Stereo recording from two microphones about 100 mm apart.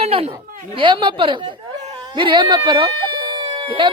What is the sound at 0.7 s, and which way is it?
A woman's voice, 55° right (ahead or behind).